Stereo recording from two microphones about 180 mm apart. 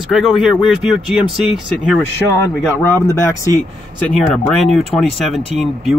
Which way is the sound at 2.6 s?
15° left (ahead or behind).